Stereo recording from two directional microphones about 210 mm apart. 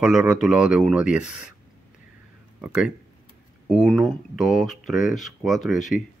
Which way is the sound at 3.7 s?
Centre (ahead or behind).